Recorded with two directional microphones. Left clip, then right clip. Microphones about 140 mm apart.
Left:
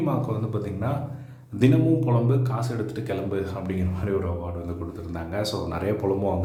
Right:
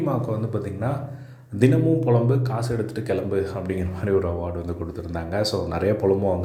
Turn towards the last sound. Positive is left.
turn(degrees=-25)  # may be behind; listen again after turning